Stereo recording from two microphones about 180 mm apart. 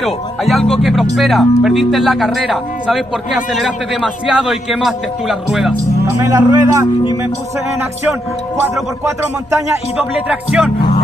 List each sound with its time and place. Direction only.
0.0 s speech: centre (ahead or behind)
6.0 s speech: 15° right (ahead or behind)
10.2 s speech: 5° right (ahead or behind)